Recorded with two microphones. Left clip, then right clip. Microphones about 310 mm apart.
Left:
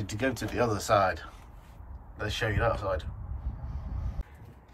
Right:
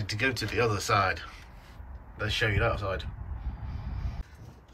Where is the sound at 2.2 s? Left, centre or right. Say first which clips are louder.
Right 1 dB; centre.